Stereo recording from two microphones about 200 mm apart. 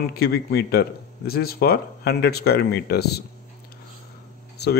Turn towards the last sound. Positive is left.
turn(degrees=55)  # may be behind; listen again after turning